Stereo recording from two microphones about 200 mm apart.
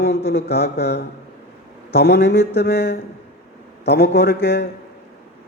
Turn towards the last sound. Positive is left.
turn(degrees=55)  # may be behind; listen again after turning